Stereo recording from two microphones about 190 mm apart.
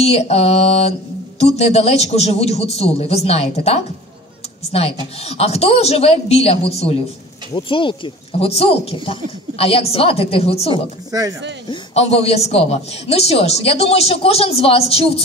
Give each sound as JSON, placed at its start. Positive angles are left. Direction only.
{"t": 0.0, "sound": "a man's voice", "side_deg": 35}
{"t": 11.1, "sound": "speech", "side_deg": -20}
{"t": 11.7, "sound": "a man's voice", "side_deg": 35}